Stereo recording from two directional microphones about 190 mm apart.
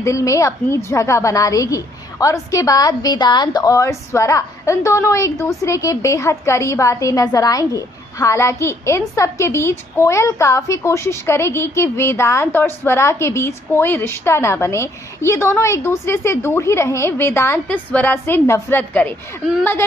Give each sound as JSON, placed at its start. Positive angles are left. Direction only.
{"t": 0.0, "sound": "a woman's voice", "side_deg": 15}